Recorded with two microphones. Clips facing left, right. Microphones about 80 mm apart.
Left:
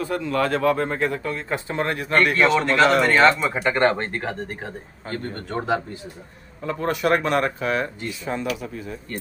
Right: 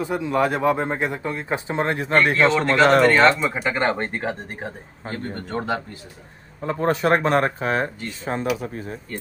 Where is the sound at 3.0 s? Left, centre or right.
Centre.